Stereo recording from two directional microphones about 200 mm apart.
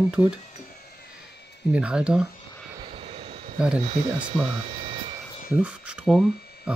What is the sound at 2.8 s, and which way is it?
Vehicle, 25° right (ahead or behind).